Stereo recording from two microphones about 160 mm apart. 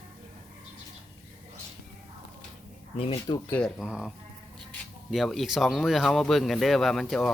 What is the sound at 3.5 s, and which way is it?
Speech, centre (ahead or behind).